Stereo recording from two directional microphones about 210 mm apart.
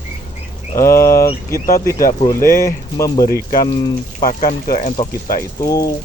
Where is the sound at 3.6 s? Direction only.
20° left (ahead or behind).